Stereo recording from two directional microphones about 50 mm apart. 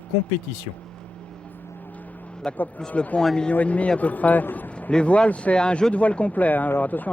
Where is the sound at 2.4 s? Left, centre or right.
Left.